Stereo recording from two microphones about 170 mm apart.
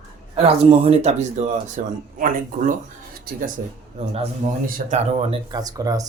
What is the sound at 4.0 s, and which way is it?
Speech, 35° right (ahead or behind).